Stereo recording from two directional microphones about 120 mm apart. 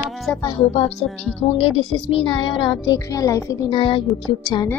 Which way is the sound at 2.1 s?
45° left (ahead or behind).